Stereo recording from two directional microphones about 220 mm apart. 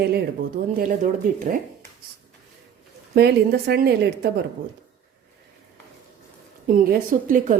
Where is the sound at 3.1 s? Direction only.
45° right (ahead or behind).